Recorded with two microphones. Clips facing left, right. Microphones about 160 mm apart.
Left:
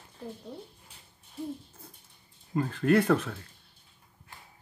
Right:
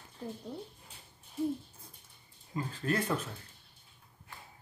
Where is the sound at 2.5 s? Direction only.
65° left (ahead or behind).